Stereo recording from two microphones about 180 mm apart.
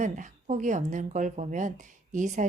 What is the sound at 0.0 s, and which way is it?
A woman's voice, 45° right (ahead or behind).